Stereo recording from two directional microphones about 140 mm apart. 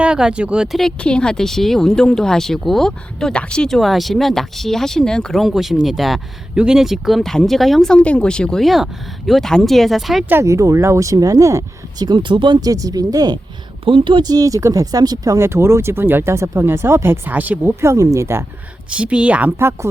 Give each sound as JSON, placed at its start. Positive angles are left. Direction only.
{"t": 0.0, "sound": "speech", "side_deg": -5}
{"t": 10.2, "sound": "speech", "side_deg": -20}
{"t": 18.9, "sound": "a woman's voice", "side_deg": -10}